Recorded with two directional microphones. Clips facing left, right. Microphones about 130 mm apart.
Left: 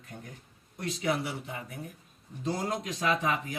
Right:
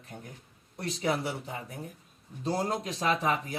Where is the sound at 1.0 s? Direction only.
35° right (ahead or behind).